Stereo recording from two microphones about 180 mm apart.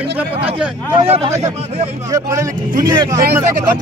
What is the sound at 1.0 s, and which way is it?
Speech, 35° right (ahead or behind).